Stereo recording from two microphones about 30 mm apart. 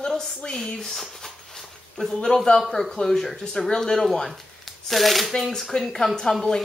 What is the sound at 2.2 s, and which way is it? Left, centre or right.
A man's voice, centre.